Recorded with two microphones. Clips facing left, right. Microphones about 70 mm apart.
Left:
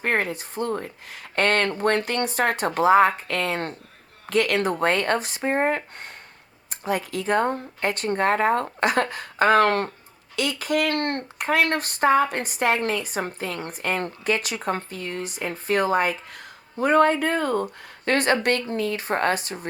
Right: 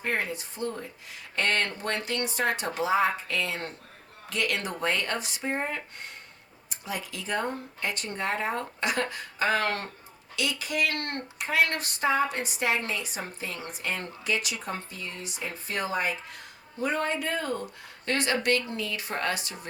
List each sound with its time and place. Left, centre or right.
0.0 s a woman's voice: left